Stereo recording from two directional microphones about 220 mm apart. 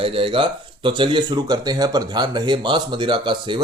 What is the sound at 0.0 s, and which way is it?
Speech, 25° right (ahead or behind).